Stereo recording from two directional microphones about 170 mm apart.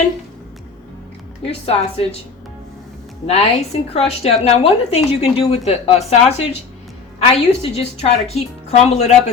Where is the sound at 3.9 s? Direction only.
35° left (ahead or behind).